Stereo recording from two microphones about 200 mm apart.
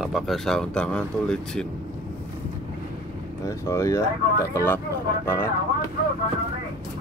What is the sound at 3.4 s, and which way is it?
Speech, 15° left (ahead or behind).